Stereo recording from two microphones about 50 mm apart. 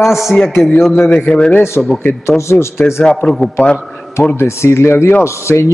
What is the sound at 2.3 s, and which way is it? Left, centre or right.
Speech, left.